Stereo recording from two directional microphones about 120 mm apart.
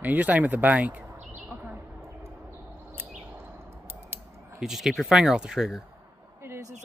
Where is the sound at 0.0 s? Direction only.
15° right (ahead or behind).